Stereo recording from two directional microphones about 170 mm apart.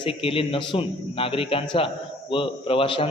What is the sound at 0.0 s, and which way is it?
A man's voice, 35° left (ahead or behind).